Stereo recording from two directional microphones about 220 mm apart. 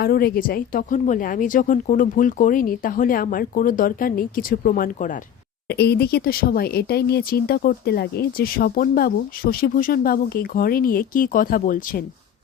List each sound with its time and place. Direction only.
0.0 s speech: 45° left (ahead or behind)
5.6 s speech: 50° left (ahead or behind)